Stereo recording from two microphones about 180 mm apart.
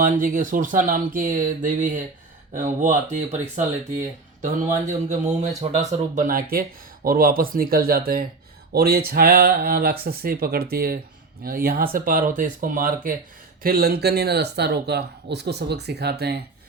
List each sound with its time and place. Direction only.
0.0 s speech: 50° right (ahead or behind)